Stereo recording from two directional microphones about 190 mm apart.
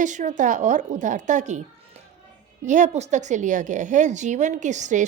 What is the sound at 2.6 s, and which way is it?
A woman's voice, 40° right (ahead or behind).